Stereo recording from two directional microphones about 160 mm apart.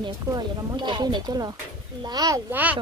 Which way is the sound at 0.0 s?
30° right (ahead or behind).